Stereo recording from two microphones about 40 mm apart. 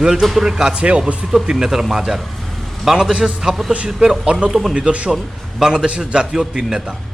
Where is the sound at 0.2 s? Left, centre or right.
Centre.